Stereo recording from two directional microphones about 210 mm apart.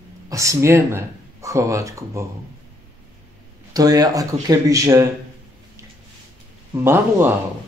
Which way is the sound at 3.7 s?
20° right (ahead or behind).